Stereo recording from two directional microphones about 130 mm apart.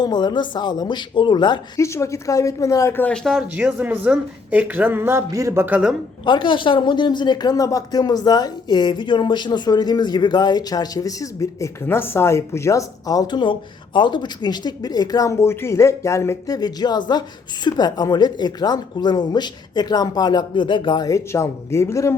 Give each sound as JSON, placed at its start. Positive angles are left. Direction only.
{"t": 0.0, "sound": "speech", "side_deg": 35}
{"t": 1.8, "sound": "speech", "side_deg": 20}
{"t": 3.5, "sound": "speech", "side_deg": -10}
{"t": 6.2, "sound": "speech", "side_deg": 40}
{"t": 16.6, "sound": "speech", "side_deg": 30}